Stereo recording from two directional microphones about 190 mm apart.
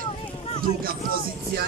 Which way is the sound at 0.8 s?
50° right (ahead or behind).